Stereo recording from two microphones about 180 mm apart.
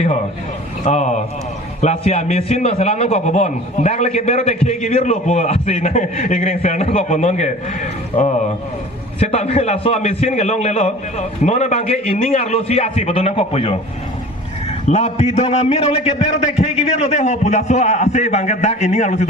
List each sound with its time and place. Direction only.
0.9 s a man's voice: 40° left (ahead or behind)
9.2 s a man's voice: 35° left (ahead or behind)
14.8 s a man's voice: 40° left (ahead or behind)